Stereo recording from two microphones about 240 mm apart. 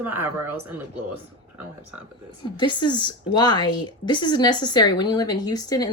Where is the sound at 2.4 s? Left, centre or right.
Centre.